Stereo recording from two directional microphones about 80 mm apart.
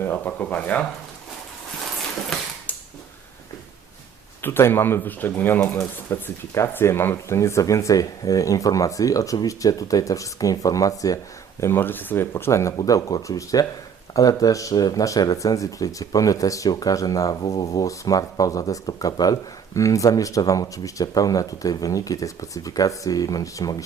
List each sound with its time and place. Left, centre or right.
0.0 s speech: left
1.8 s a sound: centre
4.4 s speech: left
11.6 s speech: left
12.7 s speech: left